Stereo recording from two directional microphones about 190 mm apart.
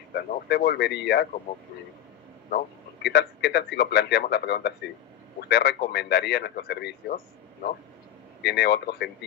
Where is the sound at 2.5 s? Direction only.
60° left (ahead or behind).